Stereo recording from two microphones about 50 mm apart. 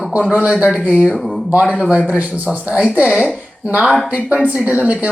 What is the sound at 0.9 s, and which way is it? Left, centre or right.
Speech, right.